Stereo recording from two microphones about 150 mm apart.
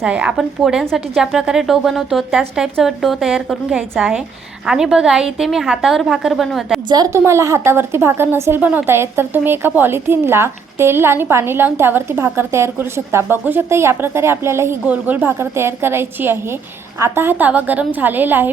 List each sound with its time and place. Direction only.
0.0 s a woman's voice: 5° right (ahead or behind)
6.8 s a woman's voice: 25° right (ahead or behind)